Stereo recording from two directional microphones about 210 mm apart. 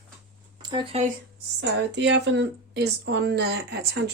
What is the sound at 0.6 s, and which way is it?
Speech, 20° right (ahead or behind).